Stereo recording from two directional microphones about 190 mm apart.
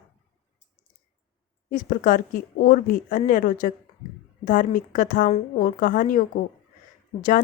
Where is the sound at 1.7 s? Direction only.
45° left (ahead or behind).